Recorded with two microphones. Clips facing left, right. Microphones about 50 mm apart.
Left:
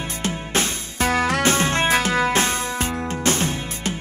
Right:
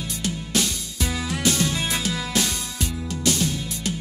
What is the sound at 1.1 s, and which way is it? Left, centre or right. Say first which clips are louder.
Music: left 10 dB; left.